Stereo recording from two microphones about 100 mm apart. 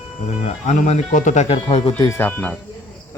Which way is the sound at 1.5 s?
60° left (ahead or behind).